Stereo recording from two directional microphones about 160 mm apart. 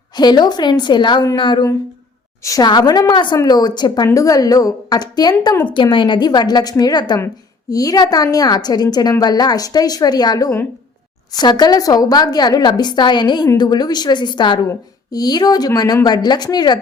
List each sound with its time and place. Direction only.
0.2 s a woman's voice: 25° left (ahead or behind)